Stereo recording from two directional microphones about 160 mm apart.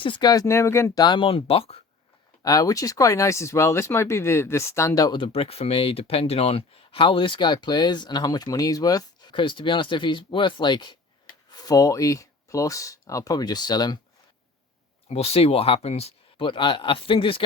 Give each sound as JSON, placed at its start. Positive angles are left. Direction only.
{"t": 0.0, "sound": "speech", "side_deg": 30}
{"t": 2.4, "sound": "speech", "side_deg": 20}
{"t": 15.1, "sound": "speech", "side_deg": 40}